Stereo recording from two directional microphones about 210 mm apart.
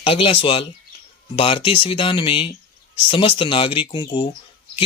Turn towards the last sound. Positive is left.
turn(degrees=20)  # may be behind; listen again after turning